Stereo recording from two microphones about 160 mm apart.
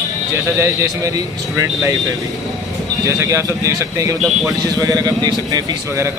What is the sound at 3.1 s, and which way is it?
Speech, 20° right (ahead or behind).